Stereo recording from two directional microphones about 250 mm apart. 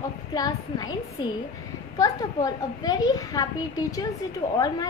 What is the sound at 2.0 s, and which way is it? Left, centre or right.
A child's voice, centre.